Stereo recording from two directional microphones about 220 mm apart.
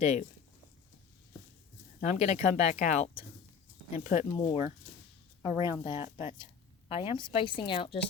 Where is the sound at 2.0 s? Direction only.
30° left (ahead or behind).